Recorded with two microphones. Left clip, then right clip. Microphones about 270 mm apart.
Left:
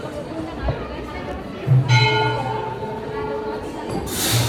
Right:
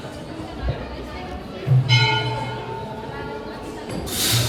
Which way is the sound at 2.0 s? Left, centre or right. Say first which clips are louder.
Left 4 dB; centre.